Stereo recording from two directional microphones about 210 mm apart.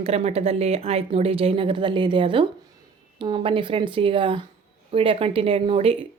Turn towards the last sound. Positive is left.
turn(degrees=-25)  # may be behind; listen again after turning